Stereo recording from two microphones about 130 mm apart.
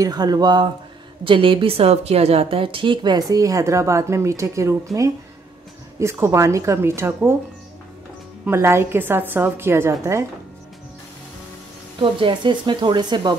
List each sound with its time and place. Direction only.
0.0 s a woman's voice: 30° right (ahead or behind)
8.5 s a woman's voice: 20° right (ahead or behind)
12.0 s a woman's voice: 40° right (ahead or behind)